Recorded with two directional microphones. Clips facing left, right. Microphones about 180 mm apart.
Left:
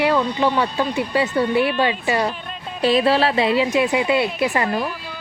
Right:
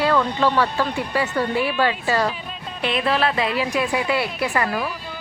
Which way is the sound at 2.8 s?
35° left (ahead or behind).